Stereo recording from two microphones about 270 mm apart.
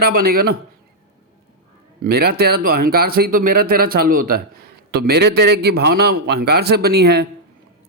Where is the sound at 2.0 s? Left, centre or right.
Right.